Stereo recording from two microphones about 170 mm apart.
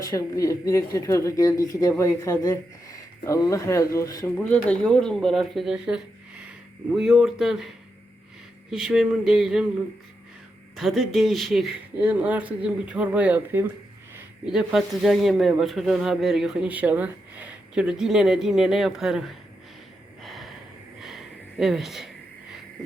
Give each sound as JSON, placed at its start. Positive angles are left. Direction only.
{"t": 0.0, "sound": "speech", "side_deg": 20}
{"t": 4.4, "sound": "speech", "side_deg": 10}
{"t": 8.7, "sound": "speech", "side_deg": 0}
{"t": 10.8, "sound": "speech", "side_deg": 0}
{"t": 20.2, "sound": "gasp", "side_deg": 0}
{"t": 21.6, "sound": "speech", "side_deg": 0}